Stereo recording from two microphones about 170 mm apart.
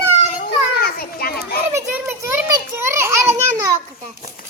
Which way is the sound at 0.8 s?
65° left (ahead or behind).